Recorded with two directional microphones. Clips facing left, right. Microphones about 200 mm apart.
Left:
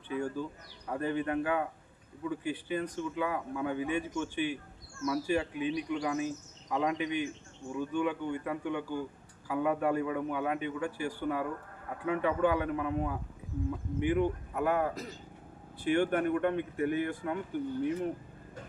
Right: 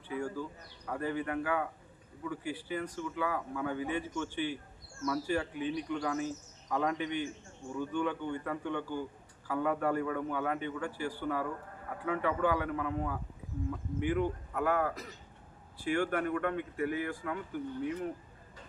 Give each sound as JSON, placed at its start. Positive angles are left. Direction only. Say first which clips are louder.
{"t": 0.1, "sound": "a man's voice", "louder": "left 2 dB", "side_deg": 20}